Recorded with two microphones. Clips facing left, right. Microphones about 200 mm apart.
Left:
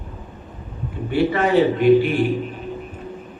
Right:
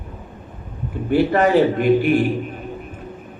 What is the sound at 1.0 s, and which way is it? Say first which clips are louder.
Speech: right 3 dB; 50° right (ahead or behind).